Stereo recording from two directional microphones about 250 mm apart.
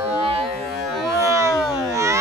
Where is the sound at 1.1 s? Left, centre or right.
Centre.